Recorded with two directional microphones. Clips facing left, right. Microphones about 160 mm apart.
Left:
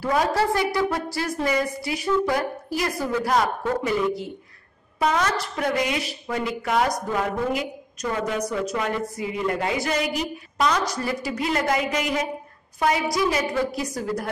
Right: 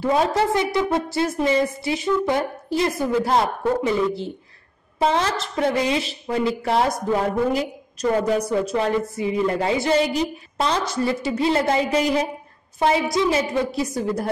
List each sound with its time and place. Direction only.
0.0 s a woman's voice: 25° right (ahead or behind)